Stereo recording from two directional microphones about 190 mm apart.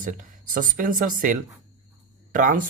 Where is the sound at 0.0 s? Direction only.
45° right (ahead or behind).